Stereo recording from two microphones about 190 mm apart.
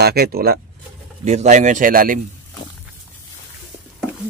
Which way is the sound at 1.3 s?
40° right (ahead or behind).